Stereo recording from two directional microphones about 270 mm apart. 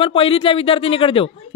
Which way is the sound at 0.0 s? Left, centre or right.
Centre.